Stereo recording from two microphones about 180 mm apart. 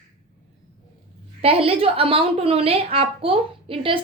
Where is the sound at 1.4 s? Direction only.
30° right (ahead or behind).